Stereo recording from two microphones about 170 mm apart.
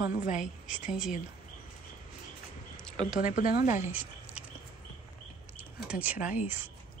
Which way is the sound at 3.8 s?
10° right (ahead or behind).